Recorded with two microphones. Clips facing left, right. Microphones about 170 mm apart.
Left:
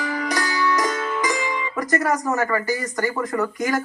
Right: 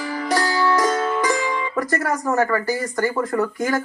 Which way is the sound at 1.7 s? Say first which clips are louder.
Left 3 dB; 15° left (ahead or behind).